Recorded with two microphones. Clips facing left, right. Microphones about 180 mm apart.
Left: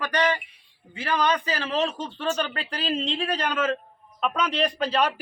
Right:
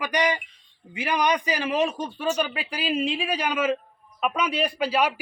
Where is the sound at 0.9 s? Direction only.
15° right (ahead or behind).